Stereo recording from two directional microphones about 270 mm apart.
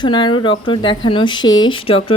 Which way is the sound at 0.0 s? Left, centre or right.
Centre.